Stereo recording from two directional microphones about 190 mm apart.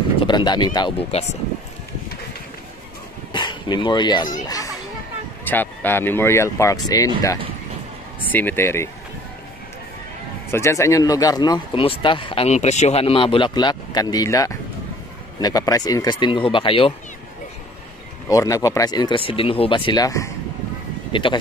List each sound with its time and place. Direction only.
0.2 s speech: 25° left (ahead or behind)
3.3 s a child's voice: 25° left (ahead or behind)
8.3 s speech: 10° left (ahead or behind)
10.5 s speech: 15° left (ahead or behind)
18.3 s speech: 15° left (ahead or behind)